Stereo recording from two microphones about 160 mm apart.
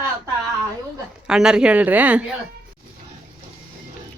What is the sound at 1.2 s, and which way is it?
Speech, 5° right (ahead or behind).